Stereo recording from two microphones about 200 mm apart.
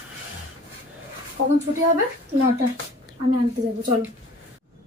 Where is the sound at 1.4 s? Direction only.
85° right.